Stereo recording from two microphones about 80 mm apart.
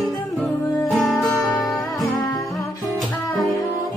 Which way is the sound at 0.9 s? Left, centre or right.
Centre.